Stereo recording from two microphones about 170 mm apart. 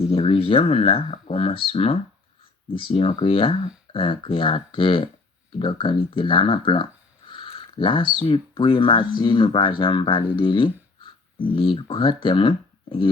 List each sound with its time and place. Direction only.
0.0 s speech: 30° left (ahead or behind)